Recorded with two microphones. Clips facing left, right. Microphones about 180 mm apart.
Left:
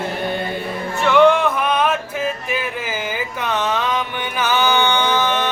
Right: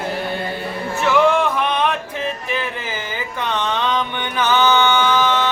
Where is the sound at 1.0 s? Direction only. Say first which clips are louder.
Left 3 dB; centre (ahead or behind).